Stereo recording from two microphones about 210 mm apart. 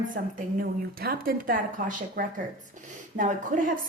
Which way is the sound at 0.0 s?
40° right (ahead or behind).